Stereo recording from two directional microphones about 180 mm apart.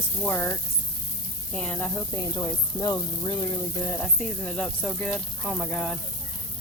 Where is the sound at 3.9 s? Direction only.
5° left (ahead or behind).